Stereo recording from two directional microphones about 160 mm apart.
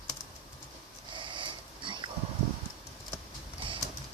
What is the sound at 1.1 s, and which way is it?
Sniff, 30° right (ahead or behind).